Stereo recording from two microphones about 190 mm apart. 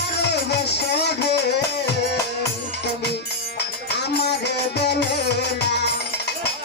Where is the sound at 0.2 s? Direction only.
60° left (ahead or behind).